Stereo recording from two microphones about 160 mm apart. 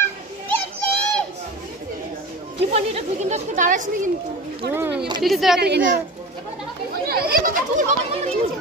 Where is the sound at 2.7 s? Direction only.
45° right (ahead or behind).